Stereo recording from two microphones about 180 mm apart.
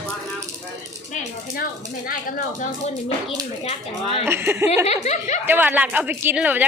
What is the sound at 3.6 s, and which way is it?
Speech, 30° left (ahead or behind).